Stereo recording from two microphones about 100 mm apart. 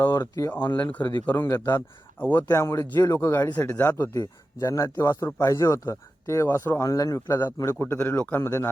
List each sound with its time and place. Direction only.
0.2 s speech: 30° left (ahead or behind)
0.5 s speech: 20° left (ahead or behind)
1.5 s speech: 30° left (ahead or behind)
4.1 s speech: 35° left (ahead or behind)